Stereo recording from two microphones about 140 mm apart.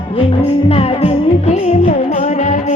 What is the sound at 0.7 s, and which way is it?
Music, 45° left (ahead or behind).